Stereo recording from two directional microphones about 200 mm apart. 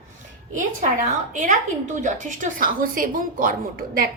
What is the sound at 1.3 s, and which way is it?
A woman's voice, 40° right (ahead or behind).